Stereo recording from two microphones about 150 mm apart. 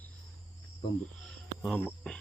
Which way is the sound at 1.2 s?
5° left (ahead or behind).